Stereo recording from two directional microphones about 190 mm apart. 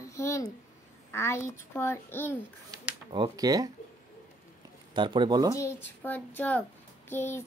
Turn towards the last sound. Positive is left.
turn(degrees=10)  # may be behind; listen again after turning